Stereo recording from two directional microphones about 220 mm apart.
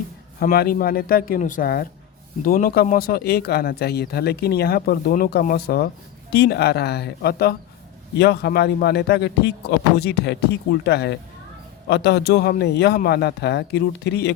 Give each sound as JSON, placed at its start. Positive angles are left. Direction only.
{"t": 0.3, "sound": "speech", "side_deg": 45}